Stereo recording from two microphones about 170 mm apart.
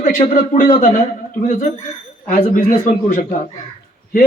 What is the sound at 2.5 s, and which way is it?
Speech, 45° left (ahead or behind).